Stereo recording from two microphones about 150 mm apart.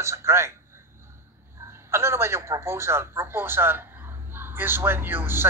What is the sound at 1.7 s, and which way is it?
A man's voice, 15° right (ahead or behind).